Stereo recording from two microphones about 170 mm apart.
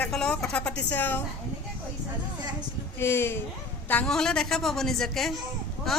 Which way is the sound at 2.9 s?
15° left (ahead or behind).